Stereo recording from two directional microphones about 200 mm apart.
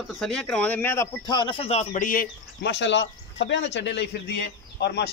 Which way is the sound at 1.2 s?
25° left (ahead or behind).